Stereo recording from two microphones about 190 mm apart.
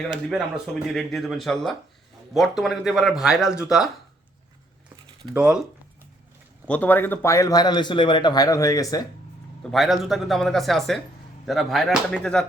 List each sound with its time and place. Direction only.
0.1 s speech: 5° right (ahead or behind)
5.3 s speech: 5° right (ahead or behind)
6.7 s a man's voice: 10° left (ahead or behind)
9.7 s speech: centre (ahead or behind)